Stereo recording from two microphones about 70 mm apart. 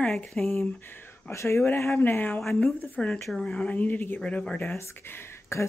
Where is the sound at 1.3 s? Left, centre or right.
Left.